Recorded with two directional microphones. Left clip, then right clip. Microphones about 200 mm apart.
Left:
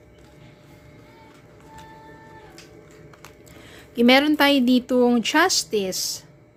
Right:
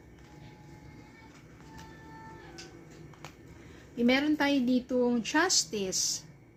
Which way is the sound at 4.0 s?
50° left (ahead or behind).